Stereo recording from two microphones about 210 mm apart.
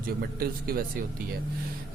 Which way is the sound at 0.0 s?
45° right (ahead or behind).